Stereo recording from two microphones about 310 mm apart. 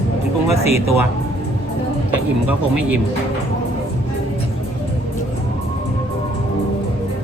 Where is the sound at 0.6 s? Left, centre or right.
Centre.